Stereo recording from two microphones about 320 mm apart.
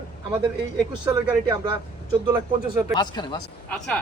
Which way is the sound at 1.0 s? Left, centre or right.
Centre.